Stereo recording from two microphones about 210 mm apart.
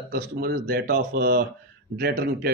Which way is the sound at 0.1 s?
50° right (ahead or behind).